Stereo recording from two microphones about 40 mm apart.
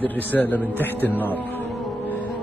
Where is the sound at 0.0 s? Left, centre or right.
Left.